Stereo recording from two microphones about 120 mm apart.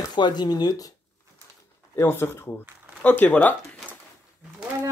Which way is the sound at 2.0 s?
20° left (ahead or behind).